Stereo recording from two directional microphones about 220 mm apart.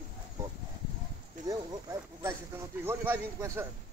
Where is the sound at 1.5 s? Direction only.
15° right (ahead or behind).